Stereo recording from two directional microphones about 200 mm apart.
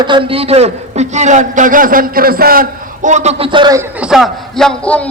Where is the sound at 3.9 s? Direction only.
5° right (ahead or behind).